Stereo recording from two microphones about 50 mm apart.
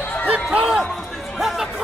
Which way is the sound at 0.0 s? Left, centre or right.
Left.